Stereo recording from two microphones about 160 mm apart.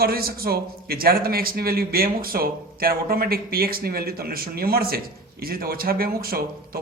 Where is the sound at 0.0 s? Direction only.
70° right (ahead or behind).